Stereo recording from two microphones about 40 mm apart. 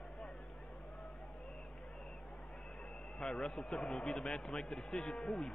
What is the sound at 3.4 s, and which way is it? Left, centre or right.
Speech, centre.